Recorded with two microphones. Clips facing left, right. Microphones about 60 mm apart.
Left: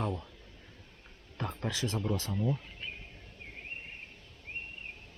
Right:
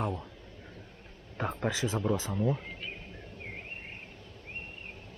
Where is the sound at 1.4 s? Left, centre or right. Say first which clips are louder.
Right 4 dB; right.